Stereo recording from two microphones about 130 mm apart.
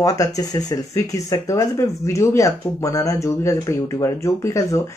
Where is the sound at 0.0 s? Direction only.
25° left (ahead or behind).